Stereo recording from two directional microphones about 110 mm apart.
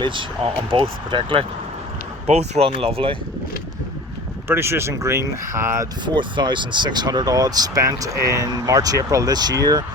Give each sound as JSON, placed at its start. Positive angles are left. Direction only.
{"t": 0.0, "sound": "speech", "side_deg": -45}
{"t": 2.2, "sound": "speech", "side_deg": -80}
{"t": 4.4, "sound": "speech", "side_deg": -20}
{"t": 6.1, "sound": "speech", "side_deg": -45}